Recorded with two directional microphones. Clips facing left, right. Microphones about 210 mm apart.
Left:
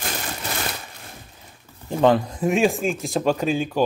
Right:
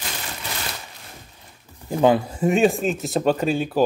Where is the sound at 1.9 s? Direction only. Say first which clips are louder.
Even; 5° right (ahead or behind).